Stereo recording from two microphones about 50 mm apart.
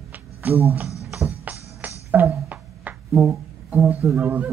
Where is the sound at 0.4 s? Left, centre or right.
Right.